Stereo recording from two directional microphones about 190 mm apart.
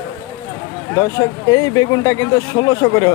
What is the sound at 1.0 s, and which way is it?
Speech, 20° left (ahead or behind).